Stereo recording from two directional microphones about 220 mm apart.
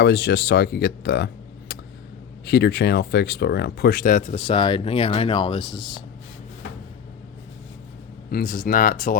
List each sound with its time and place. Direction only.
0.0 s speech: 50° left (ahead or behind); by 6.0 s 20° left (ahead or behind)
8.3 s speech: 40° left (ahead or behind)